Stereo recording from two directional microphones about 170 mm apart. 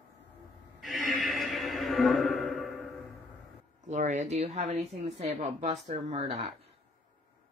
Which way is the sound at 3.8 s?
45° right (ahead or behind).